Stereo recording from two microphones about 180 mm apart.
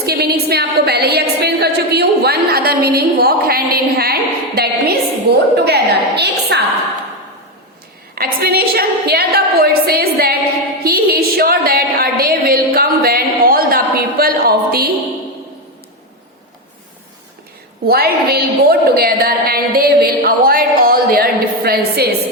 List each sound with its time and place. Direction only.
0.0 s a sound: 60° right (ahead or behind)
5.5 s a woman's voice: 65° right (ahead or behind)
8.1 s a woman's voice: 55° right (ahead or behind)
17.8 s a woman's voice: 55° right (ahead or behind)